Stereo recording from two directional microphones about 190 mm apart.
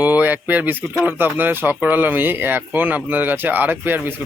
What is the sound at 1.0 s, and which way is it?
Speech, 10° right (ahead or behind).